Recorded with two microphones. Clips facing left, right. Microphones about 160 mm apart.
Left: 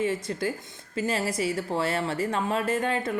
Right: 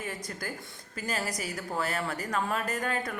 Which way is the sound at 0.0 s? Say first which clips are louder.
Left 10 dB; 25° left (ahead or behind).